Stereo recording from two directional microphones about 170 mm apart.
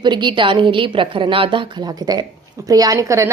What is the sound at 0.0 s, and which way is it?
A woman's voice, 25° right (ahead or behind).